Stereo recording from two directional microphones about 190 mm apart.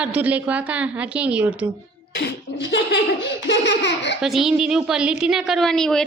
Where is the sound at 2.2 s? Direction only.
65° left (ahead or behind).